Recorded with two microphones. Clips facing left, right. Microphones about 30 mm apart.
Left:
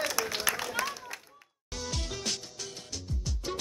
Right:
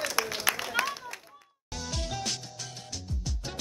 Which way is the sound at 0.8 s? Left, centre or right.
Right.